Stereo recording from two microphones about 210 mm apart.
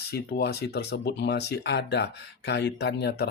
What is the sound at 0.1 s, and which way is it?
Speech, 50° left (ahead or behind).